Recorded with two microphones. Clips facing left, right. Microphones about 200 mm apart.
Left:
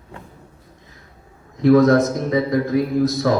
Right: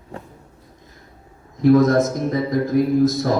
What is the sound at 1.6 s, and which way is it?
Speech, 55° left (ahead or behind).